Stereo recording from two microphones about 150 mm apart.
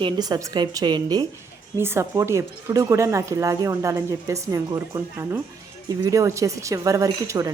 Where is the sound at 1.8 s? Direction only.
15° right (ahead or behind).